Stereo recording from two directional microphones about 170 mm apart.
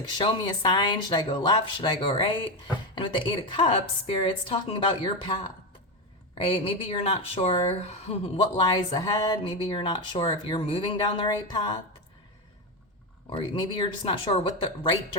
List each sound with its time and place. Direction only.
0.2 s speech: 25° left (ahead or behind)
13.3 s speech: 30° left (ahead or behind)